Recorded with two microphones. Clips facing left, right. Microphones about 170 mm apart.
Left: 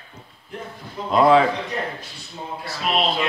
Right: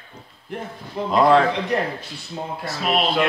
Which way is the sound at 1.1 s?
5° left (ahead or behind).